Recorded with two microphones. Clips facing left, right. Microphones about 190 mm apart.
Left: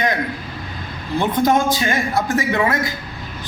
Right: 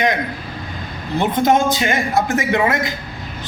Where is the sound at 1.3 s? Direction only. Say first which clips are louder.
Right 1 dB; 20° right (ahead or behind).